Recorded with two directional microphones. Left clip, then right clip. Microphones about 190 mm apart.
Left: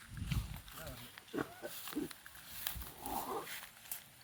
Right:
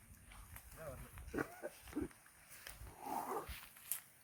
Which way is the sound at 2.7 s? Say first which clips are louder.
Left 10 dB; 30° left (ahead or behind).